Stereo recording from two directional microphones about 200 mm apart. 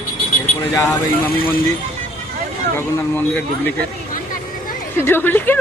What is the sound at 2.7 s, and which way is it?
Speech, 10° left (ahead or behind).